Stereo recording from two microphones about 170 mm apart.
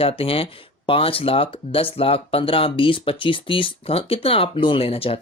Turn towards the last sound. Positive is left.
turn(degrees=35)  # may be behind; listen again after turning